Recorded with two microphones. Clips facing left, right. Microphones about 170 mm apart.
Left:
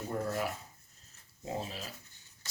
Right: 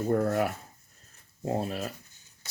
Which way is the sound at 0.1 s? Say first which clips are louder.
Right 8 dB; 60° right (ahead or behind).